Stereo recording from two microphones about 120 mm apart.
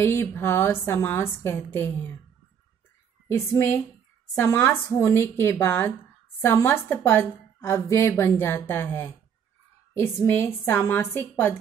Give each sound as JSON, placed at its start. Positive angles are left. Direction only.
{"t": 0.0, "sound": "a woman's voice", "side_deg": 20}
{"t": 3.3, "sound": "a woman's voice", "side_deg": 20}